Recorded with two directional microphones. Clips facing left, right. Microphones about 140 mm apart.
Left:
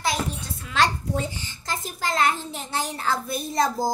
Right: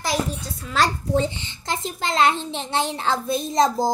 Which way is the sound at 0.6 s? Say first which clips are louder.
Right 1 dB; 40° right (ahead or behind).